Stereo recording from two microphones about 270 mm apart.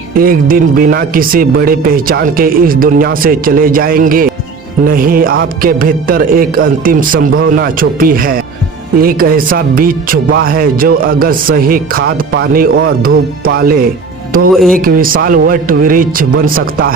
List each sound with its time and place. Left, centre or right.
0.1 s speech: right
14.5 s speech: centre
14.8 s speech: right